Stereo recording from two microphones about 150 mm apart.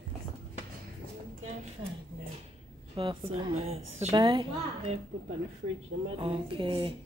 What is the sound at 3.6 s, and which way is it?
Speech, 45° right (ahead or behind).